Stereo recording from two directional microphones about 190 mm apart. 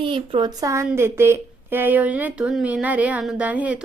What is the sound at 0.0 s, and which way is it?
A woman's voice, 25° right (ahead or behind).